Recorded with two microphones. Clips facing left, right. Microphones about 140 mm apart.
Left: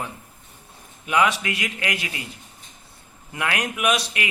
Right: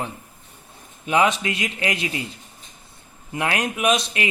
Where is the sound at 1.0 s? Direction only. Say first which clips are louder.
Right 2 dB; 25° right (ahead or behind).